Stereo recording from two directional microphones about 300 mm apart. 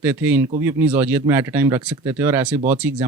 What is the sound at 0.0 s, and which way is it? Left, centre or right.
Speech, centre.